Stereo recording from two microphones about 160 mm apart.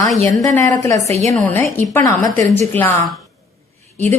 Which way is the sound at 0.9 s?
45° right (ahead or behind).